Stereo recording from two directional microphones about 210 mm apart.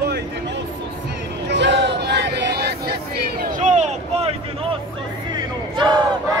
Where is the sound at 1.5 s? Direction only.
55° right (ahead or behind); by 4.4 s 30° right (ahead or behind).